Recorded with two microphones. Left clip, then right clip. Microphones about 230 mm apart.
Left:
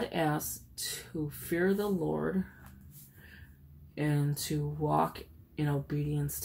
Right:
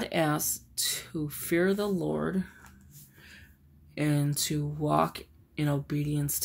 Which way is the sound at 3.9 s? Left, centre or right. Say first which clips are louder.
Right 4 dB; right.